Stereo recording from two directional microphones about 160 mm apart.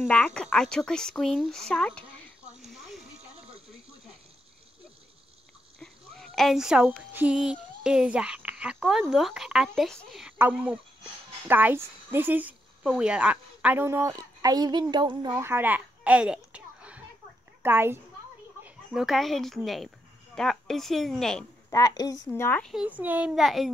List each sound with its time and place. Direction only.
0.1 s speech: 5° left (ahead or behind)
5.8 s a woman's voice: centre (ahead or behind); by 15.3 s 30° right (ahead or behind)
15.3 s a child's voice: 15° right (ahead or behind)
18.6 s speech: centre (ahead or behind)
21.6 s speech: 25° left (ahead or behind)
22.7 s speech: 5° right (ahead or behind)